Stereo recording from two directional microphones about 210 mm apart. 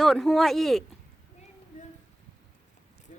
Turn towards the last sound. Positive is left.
turn(degrees=35)  # may be behind; listen again after turning